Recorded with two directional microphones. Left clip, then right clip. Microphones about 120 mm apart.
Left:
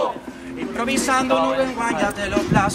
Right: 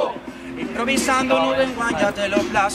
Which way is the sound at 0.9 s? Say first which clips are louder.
Right 1 dB; centre (ahead or behind).